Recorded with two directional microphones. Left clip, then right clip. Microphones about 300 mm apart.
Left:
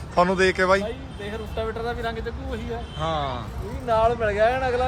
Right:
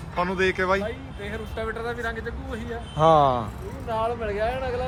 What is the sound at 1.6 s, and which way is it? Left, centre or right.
Speech, centre.